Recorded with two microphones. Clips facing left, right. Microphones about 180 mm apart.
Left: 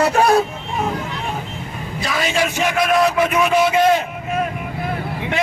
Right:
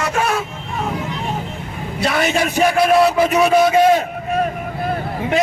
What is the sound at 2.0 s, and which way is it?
Speech, 65° right (ahead or behind).